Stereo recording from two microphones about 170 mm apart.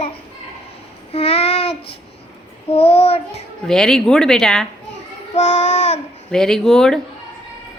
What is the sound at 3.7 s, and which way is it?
Speech, 5° left (ahead or behind).